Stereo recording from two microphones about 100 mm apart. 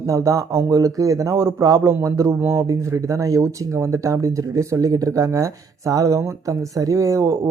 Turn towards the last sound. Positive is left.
turn(degrees=-35)  # may be behind; listen again after turning